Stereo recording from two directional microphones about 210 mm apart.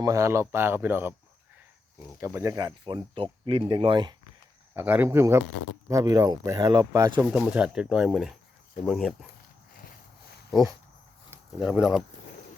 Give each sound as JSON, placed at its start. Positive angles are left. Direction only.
{"t": 0.0, "sound": "speech", "side_deg": -15}
{"t": 2.2, "sound": "speech", "side_deg": -15}
{"t": 4.7, "sound": "speech", "side_deg": -10}
{"t": 11.3, "sound": "speech", "side_deg": -5}